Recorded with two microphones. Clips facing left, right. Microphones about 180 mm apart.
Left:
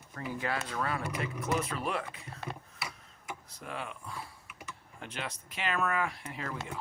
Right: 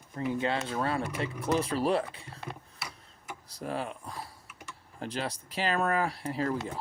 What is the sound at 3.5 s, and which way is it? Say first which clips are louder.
Speech: right 8 dB; 35° right (ahead or behind).